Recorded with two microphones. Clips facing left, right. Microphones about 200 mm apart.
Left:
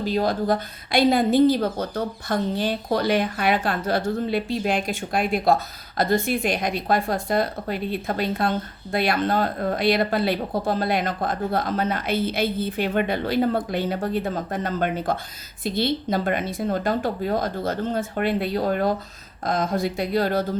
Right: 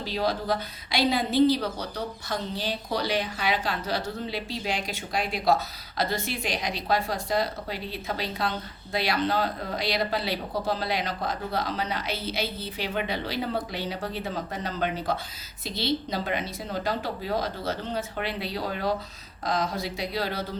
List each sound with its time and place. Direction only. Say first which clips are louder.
0.0 s a woman's voice: left 6 dB; 50° left (ahead or behind)